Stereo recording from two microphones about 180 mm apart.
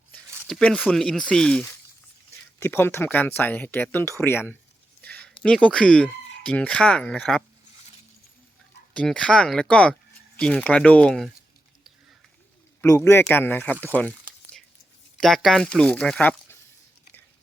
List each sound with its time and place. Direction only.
0.4 s speech: 5° left (ahead or behind)
5.0 s a sound: 10° left (ahead or behind)
5.4 s speech: 5° left (ahead or behind)
8.9 s speech: 5° left (ahead or behind)
12.8 s speech: 15° left (ahead or behind)
15.2 s speech: centre (ahead or behind)